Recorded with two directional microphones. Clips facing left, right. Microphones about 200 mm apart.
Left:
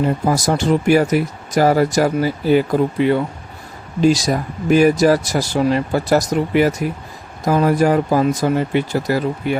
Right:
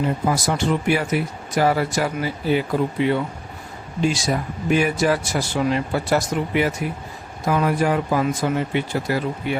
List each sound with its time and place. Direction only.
0.3 s speech: 40° left (ahead or behind)